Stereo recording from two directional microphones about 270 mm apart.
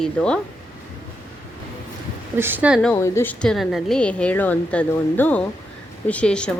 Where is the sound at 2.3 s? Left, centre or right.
Centre.